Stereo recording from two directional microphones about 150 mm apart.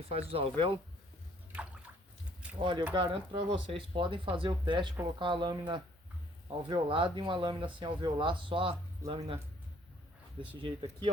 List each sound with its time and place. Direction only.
0.1 s speech: 40° right (ahead or behind)
2.6 s speech: 30° right (ahead or behind)
10.6 s speech: 35° right (ahead or behind)